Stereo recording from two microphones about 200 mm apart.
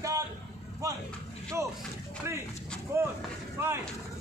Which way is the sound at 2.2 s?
15° right (ahead or behind).